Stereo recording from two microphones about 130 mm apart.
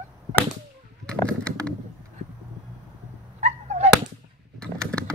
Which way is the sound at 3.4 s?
60° right (ahead or behind).